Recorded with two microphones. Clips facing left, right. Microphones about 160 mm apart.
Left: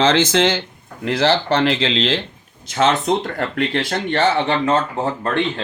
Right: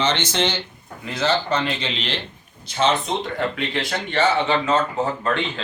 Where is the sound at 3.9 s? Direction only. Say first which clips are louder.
Left 3 dB; 55° left (ahead or behind).